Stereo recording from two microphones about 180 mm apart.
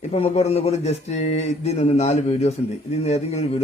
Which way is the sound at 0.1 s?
35° left (ahead or behind).